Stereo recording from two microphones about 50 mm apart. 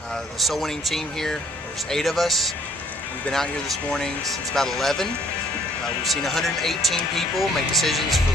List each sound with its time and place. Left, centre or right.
0.4 s speech: centre
3.9 s speech: centre
6.0 s speech: centre